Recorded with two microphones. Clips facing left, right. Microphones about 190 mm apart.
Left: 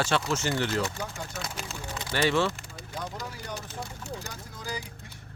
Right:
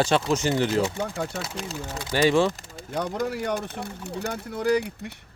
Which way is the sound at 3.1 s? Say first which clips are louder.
Right 11 dB; 65° right (ahead or behind).